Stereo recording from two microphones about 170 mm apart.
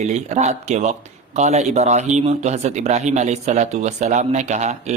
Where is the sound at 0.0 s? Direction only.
40° right (ahead or behind).